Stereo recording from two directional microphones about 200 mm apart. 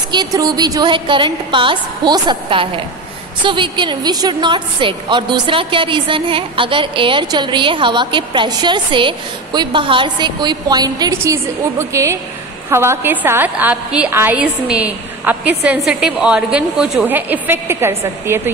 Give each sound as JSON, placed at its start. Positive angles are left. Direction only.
{"t": 0.1, "sound": "a woman's voice", "side_deg": -20}